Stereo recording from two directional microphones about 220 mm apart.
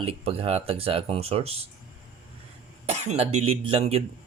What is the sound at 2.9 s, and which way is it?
Speech, 30° right (ahead or behind).